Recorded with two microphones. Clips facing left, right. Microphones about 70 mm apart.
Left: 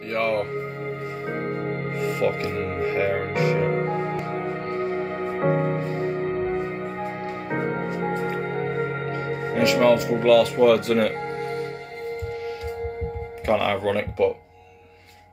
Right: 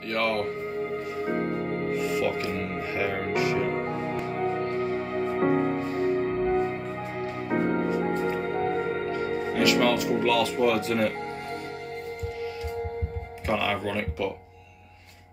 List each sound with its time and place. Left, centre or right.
0.1 s speech: left
1.3 s music: left
6.2 s music: centre
7.2 s music: left
9.3 s speech: left
13.5 s speech: left